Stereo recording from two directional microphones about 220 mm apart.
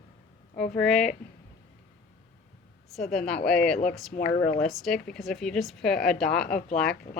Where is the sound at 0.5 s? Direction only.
45° left (ahead or behind).